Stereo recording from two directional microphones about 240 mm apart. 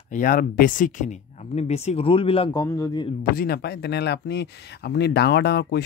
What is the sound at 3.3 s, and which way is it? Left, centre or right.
Speech, left.